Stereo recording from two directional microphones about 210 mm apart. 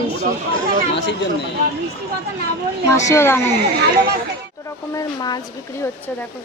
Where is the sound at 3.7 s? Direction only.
50° right (ahead or behind).